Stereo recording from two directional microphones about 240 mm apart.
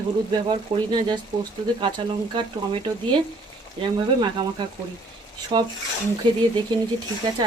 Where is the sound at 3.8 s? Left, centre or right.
Centre.